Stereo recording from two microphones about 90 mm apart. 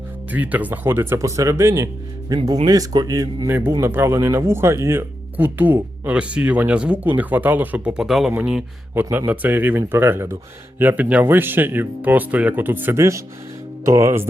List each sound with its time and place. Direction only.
0.3 s speech: 15° right (ahead or behind); by 1.9 s 35° right (ahead or behind)
2.3 s speech: 45° right (ahead or behind)
3.5 s speech: 30° right (ahead or behind)
7.9 s speech: 5° right (ahead or behind)
9.1 s speech: 20° right (ahead or behind)